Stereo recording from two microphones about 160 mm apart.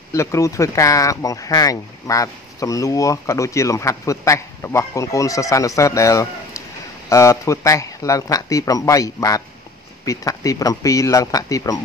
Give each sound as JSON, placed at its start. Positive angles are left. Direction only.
{"t": 0.1, "sound": "speech", "side_deg": 20}